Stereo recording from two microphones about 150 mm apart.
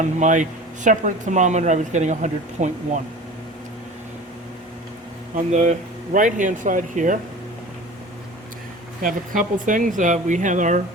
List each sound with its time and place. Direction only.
0.0 s speech: 55° right (ahead or behind)
5.5 s speech: 55° right (ahead or behind)
9.0 s speech: 65° right (ahead or behind)